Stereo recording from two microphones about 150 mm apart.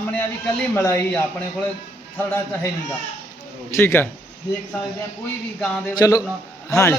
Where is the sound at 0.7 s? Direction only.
15° left (ahead or behind).